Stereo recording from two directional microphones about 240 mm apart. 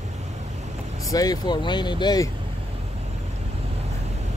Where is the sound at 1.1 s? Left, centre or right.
Centre.